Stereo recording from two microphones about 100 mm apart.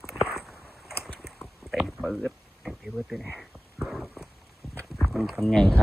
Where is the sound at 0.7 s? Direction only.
Centre (ahead or behind).